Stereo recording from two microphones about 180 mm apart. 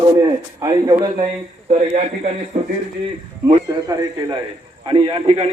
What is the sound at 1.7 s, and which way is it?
Speech, 40° right (ahead or behind).